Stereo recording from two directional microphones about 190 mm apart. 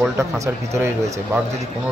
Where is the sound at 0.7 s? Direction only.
15° right (ahead or behind).